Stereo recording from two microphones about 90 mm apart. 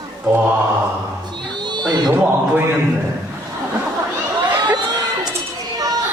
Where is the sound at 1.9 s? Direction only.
50° right (ahead or behind).